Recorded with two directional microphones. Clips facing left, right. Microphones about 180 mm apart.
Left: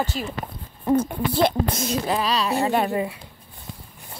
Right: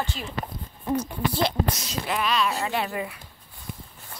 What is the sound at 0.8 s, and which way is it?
A child's voice, 55° left (ahead or behind).